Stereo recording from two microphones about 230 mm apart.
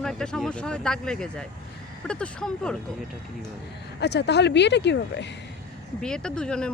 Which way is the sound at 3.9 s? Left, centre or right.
Left.